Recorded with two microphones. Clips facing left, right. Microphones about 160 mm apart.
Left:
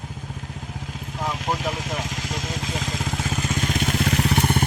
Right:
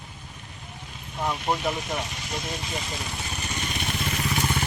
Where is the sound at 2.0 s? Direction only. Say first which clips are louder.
Left 3 dB; 90° left.